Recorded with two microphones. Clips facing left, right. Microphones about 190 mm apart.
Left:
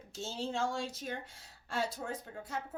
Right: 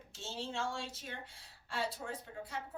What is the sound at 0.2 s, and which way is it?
A woman's voice, 40° left (ahead or behind).